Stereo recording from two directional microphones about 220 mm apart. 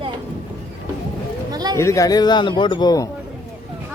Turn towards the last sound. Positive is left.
turn(degrees=15)  # may be behind; listen again after turning